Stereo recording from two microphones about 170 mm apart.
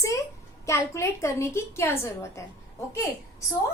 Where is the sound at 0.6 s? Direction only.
15° left (ahead or behind).